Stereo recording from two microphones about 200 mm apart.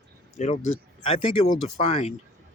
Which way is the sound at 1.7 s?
35° left (ahead or behind).